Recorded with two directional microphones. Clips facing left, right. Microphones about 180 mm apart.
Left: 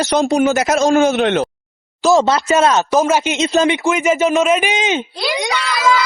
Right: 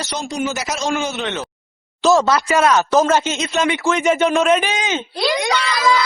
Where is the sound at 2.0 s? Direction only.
10° left (ahead or behind).